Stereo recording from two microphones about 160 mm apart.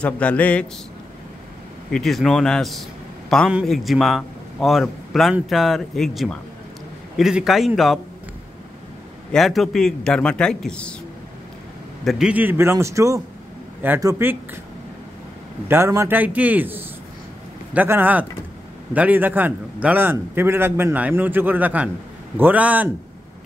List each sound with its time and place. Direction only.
0.0 s a man's voice: 10° left (ahead or behind)
1.9 s a man's voice: centre (ahead or behind)
9.3 s a man's voice: centre (ahead or behind)
12.0 s a man's voice: centre (ahead or behind)
15.7 s a man's voice: 15° right (ahead or behind)